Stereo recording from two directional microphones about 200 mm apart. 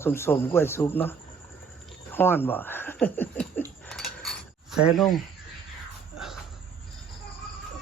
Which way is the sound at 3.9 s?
Centre (ahead or behind).